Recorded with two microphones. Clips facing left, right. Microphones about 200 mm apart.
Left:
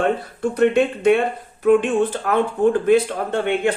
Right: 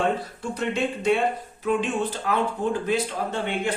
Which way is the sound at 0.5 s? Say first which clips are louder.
Left 9 dB; 60° left (ahead or behind).